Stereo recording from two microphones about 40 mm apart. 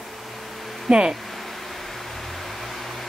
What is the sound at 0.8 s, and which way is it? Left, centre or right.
Speech, centre.